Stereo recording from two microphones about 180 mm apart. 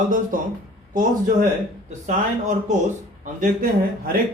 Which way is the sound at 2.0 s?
40° right (ahead or behind).